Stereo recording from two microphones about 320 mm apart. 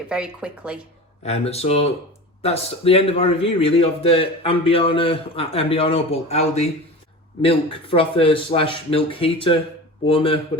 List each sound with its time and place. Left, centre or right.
0.1 s speech: centre
1.2 s a man's voice: centre